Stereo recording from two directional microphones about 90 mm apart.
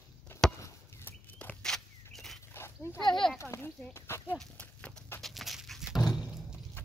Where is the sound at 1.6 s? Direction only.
5° left (ahead or behind).